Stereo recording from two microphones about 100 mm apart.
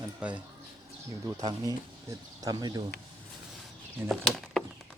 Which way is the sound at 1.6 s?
35° right (ahead or behind).